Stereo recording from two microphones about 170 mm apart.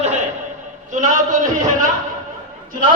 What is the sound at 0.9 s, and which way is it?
Speech, 45° right (ahead or behind).